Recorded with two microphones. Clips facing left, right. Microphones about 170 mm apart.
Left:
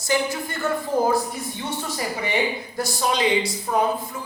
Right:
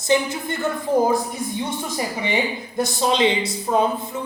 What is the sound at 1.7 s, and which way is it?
A woman's voice, 20° right (ahead or behind).